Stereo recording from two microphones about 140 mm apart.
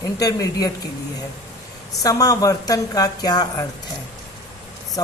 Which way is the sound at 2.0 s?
25° left (ahead or behind).